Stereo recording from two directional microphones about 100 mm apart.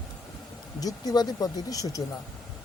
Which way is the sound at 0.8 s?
40° left (ahead or behind).